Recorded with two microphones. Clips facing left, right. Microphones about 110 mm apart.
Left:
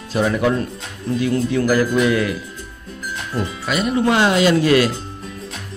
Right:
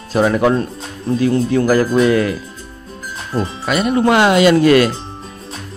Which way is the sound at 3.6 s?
50° right (ahead or behind).